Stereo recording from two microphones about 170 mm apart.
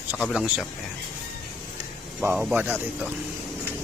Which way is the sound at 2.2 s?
10° right (ahead or behind).